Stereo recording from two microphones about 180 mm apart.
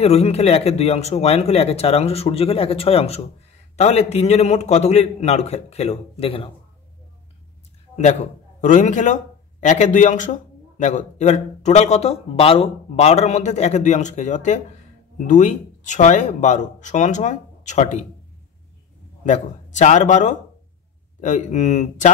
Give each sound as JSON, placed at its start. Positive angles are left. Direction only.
{"t": 0.0, "sound": "a man's voice", "side_deg": 35}
{"t": 7.9, "sound": "a man's voice", "side_deg": 40}
{"t": 19.2, "sound": "a man's voice", "side_deg": 40}